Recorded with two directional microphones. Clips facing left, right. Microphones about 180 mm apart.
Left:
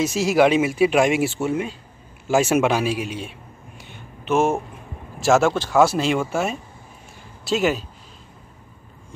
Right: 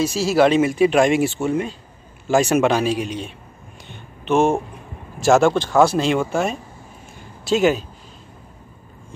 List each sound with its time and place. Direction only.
0.0 s speech: 20° left (ahead or behind)
3.8 s a sound: 5° left (ahead or behind)
5.2 s speech: centre (ahead or behind)